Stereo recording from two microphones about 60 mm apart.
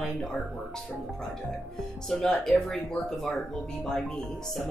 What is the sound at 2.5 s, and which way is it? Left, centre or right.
Speech, centre.